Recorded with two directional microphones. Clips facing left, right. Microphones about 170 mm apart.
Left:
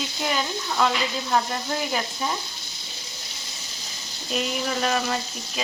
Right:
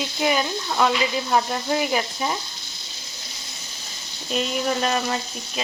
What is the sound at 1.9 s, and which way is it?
Speech, 5° right (ahead or behind).